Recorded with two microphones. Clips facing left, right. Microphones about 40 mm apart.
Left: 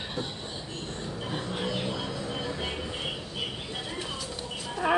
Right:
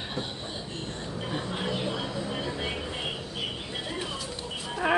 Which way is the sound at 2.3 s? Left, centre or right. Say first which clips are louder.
Right 1 dB; centre.